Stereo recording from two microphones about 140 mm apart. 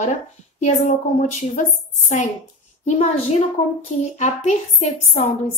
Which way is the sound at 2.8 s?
55° left (ahead or behind).